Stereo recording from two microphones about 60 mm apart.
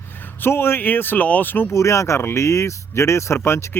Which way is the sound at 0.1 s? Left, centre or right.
Left.